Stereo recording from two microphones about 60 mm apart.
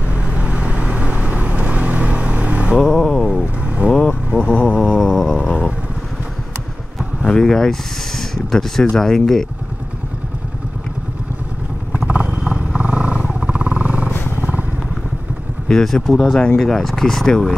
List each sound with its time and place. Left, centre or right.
0.1 s vehicle: right
2.9 s a sound: centre
3.6 s vehicle: right
4.9 s a sound: centre
7.2 s vehicle: centre
8.2 s speech: centre
12.1 s vehicle: centre
14.1 s vehicle: left
14.4 s vehicle: right
15.7 s speech: centre